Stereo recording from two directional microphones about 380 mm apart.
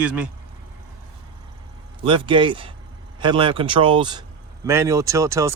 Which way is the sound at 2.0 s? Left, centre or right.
Centre.